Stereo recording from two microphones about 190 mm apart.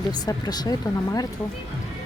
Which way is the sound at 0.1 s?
20° left (ahead or behind).